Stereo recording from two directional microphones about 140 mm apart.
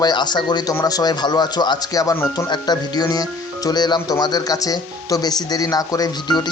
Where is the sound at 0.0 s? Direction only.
30° left (ahead or behind).